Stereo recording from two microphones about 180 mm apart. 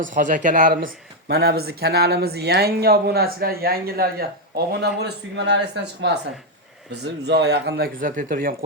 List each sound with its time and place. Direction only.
0.0 s speech: 45° right (ahead or behind)
0.9 s speech: 65° right (ahead or behind)